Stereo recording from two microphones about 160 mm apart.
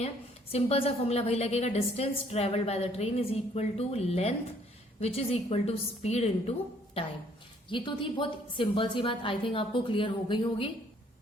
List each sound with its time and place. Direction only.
0.5 s a woman's voice: 40° left (ahead or behind)